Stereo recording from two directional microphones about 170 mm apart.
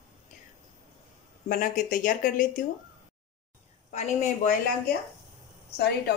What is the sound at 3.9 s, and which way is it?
Speech, 45° left (ahead or behind).